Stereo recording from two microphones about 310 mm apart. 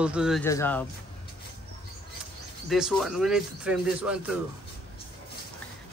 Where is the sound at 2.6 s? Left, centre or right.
Centre.